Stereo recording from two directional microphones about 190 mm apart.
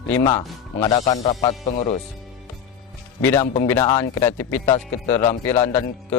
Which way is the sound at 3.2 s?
15° left (ahead or behind).